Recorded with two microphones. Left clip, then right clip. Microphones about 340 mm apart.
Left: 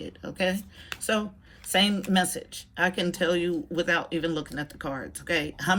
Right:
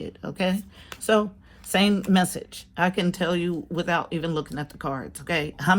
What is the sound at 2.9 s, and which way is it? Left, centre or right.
Speech, centre.